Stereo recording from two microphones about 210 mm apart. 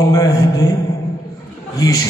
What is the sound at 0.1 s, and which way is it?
Mantra, 15° left (ahead or behind).